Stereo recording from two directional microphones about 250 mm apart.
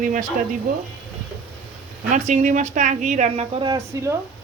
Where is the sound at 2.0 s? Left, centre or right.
Right.